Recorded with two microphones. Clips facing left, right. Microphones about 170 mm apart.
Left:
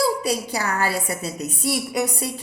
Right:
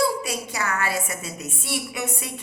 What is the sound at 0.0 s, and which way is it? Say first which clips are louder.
A woman's voice: left 3 dB; 35° left (ahead or behind).